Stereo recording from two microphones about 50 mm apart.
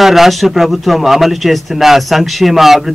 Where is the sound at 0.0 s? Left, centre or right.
Centre.